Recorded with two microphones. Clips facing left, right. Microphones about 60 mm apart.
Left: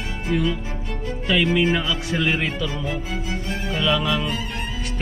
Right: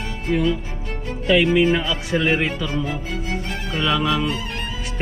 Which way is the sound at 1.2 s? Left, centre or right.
Centre.